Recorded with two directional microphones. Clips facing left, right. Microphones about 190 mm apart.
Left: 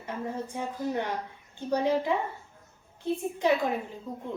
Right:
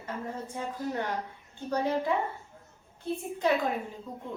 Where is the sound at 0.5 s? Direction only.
20° left (ahead or behind).